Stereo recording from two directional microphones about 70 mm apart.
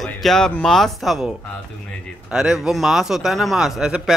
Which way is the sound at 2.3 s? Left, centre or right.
Centre.